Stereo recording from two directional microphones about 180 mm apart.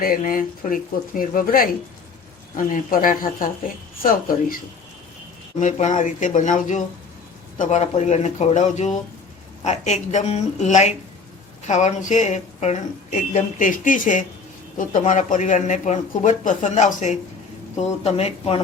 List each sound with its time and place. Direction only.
0.0 s speech: 50° left (ahead or behind)
5.5 s speech: 40° left (ahead or behind)